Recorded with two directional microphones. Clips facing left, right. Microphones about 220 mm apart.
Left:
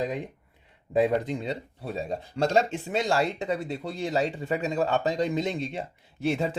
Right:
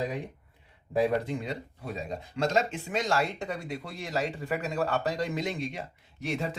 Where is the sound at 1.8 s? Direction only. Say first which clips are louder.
Left 4 dB; 30° left (ahead or behind).